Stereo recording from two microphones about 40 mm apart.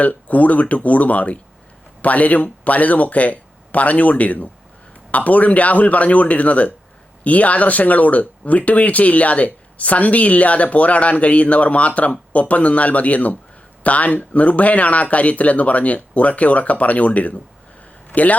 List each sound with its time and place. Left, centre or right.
0.0 s speech: left